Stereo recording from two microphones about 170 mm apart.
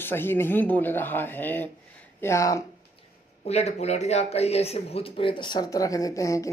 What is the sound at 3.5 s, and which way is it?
Speech, 40° left (ahead or behind).